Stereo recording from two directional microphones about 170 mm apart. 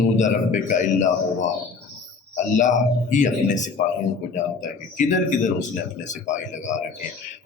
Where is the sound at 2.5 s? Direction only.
45° left (ahead or behind).